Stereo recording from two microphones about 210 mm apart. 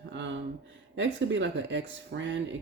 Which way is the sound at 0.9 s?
60° right (ahead or behind).